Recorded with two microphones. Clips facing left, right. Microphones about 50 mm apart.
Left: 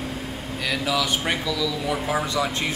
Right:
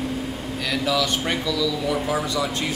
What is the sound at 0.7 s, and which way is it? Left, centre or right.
Speech, centre.